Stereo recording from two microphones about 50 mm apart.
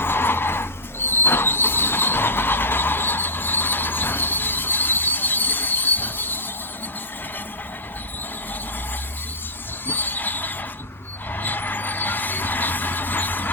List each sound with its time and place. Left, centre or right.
0.0 s squeal: left
9.8 s train: left
11.3 s vehicle: left